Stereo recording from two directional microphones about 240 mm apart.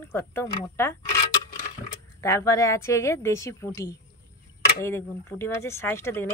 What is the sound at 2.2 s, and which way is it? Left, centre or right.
Speech, centre.